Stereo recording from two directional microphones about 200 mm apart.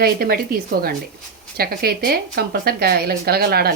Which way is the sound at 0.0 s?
50° right (ahead or behind).